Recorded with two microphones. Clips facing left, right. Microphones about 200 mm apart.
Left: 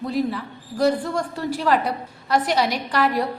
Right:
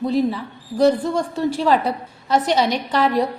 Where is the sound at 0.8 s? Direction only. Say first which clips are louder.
Right 4 dB; 20° right (ahead or behind).